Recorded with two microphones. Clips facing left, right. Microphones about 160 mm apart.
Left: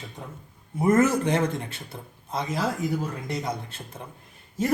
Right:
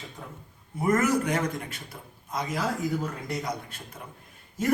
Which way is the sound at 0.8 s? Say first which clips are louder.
Left 3 dB; 25° left (ahead or behind).